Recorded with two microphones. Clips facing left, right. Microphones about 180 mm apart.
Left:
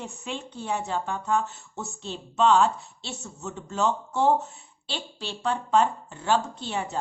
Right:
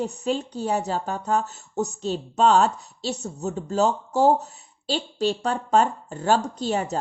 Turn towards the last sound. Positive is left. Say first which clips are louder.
# right 6 dB
turn(degrees=-40)  # may be behind; listen again after turning